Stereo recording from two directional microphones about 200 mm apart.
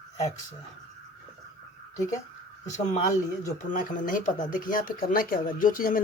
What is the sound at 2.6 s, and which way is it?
Speech, 35° left (ahead or behind).